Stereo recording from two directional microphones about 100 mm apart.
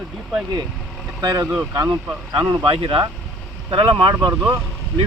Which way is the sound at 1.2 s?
40° right (ahead or behind).